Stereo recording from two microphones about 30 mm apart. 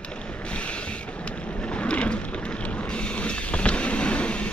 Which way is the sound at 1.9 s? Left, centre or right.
Left.